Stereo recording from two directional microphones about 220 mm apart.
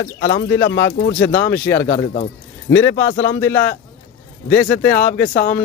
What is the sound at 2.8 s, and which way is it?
Speech, 10° left (ahead or behind).